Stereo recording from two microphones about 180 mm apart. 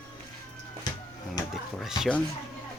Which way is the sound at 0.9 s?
20° left (ahead or behind).